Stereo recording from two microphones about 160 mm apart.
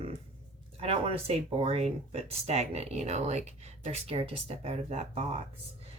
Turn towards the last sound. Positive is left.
turn(degrees=-40)  # may be behind; listen again after turning